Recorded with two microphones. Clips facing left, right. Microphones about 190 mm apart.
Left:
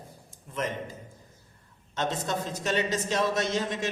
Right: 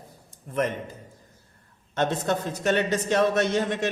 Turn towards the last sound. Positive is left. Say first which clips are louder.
# right 5 dB
turn(degrees=-60)  # may be behind; listen again after turning